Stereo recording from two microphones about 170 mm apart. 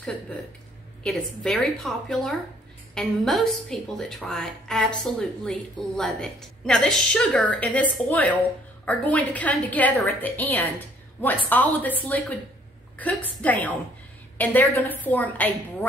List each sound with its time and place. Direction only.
1.0 s a woman's voice: 5° left (ahead or behind)